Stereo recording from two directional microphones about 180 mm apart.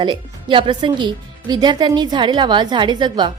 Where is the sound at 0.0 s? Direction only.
25° right (ahead or behind).